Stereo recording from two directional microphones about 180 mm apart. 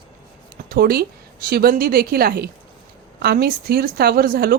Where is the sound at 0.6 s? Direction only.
55° right (ahead or behind).